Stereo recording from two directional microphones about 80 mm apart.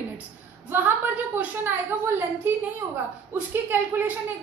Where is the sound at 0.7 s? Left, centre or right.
Right.